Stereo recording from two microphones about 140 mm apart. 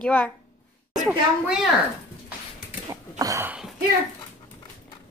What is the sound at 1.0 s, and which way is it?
Speech, 5° right (ahead or behind).